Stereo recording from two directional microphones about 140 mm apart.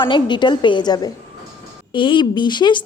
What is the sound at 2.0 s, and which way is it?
Speech, 35° left (ahead or behind).